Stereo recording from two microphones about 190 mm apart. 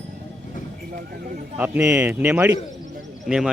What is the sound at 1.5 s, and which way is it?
Speech, 10° right (ahead or behind).